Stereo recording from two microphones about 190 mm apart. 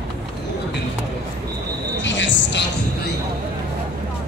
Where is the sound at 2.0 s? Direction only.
70° left (ahead or behind).